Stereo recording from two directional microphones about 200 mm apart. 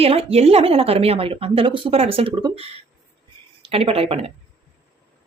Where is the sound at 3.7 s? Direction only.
30° right (ahead or behind).